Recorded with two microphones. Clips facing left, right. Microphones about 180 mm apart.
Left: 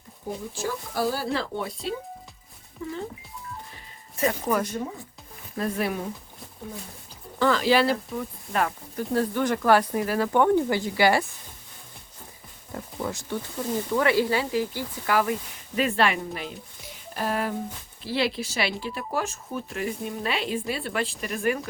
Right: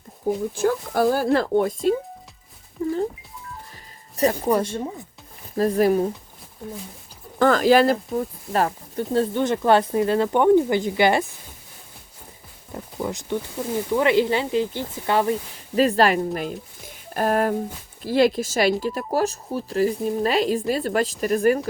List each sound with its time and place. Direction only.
0.5 s speech: 55° right (ahead or behind)
2.8 s speech: 40° right (ahead or behind)
4.2 s speech: 35° right (ahead or behind)
7.3 s speech: 50° right (ahead or behind); by 9.0 s 35° right (ahead or behind)
9.1 s speech: 25° right (ahead or behind)
12.7 s a sound: 15° right (ahead or behind)
13.9 s speech: 20° right (ahead or behind); by 21.7 s 40° right (ahead or behind)